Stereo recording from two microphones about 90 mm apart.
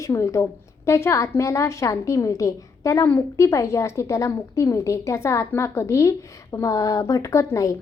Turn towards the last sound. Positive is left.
turn(degrees=35)  # may be behind; listen again after turning